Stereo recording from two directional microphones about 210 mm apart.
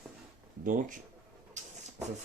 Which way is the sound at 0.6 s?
40° right (ahead or behind).